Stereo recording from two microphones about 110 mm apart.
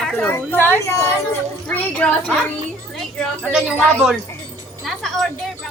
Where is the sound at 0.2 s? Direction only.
20° left (ahead or behind).